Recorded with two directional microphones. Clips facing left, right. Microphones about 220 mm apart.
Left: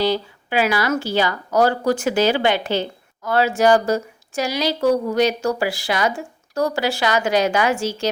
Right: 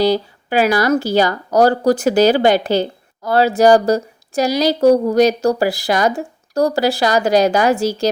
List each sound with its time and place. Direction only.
0.0 s a woman's voice: 40° right (ahead or behind)